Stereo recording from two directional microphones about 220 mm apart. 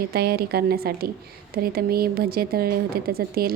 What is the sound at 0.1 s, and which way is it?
Speech, 45° right (ahead or behind).